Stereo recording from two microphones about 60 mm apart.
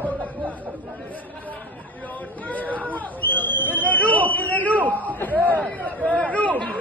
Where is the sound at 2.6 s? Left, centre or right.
Right.